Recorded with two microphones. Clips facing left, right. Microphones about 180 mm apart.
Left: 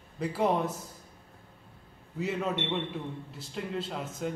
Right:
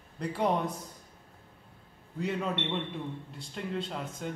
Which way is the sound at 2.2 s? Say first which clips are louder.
Left 1 dB; 5° left (ahead or behind).